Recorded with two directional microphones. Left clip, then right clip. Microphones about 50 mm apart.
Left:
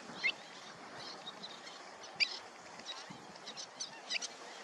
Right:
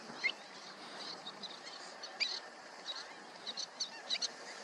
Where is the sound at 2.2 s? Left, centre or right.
Centre.